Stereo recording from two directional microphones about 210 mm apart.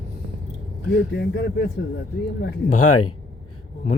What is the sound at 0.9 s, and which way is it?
Speech, 55° left (ahead or behind).